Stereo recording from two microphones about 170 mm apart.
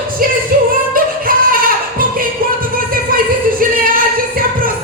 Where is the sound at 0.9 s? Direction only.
55° right (ahead or behind).